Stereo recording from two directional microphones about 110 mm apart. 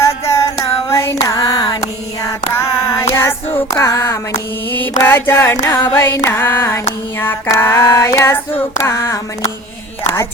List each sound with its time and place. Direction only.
0.0 s female singing: 25° left (ahead or behind); by 1.8 s 45° left (ahead or behind)
2.2 s female singing: 25° left (ahead or behind)
4.9 s female singing: 20° left (ahead or behind)